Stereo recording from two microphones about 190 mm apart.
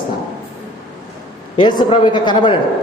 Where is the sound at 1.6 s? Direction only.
25° left (ahead or behind).